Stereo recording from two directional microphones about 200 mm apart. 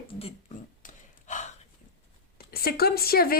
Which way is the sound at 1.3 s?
40° left (ahead or behind).